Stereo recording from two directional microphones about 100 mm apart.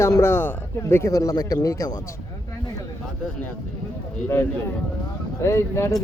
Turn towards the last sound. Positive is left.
turn(degrees=30)  # may be behind; listen again after turning